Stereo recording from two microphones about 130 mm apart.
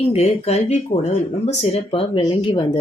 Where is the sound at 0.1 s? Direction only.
55° left (ahead or behind).